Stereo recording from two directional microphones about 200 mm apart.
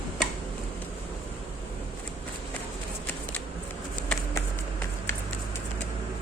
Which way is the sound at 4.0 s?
5° left (ahead or behind).